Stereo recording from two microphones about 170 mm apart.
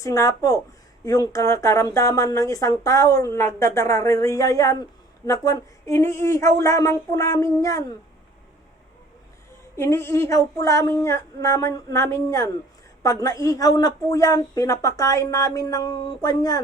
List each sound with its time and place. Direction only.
0.0 s speech: 20° left (ahead or behind)
9.7 s a woman's voice: 15° left (ahead or behind)